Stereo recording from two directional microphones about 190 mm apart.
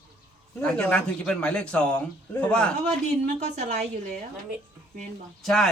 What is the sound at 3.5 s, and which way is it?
Speech, 40° right (ahead or behind).